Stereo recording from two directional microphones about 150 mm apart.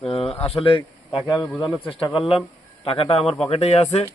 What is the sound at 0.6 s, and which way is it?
Speech, 35° left (ahead or behind).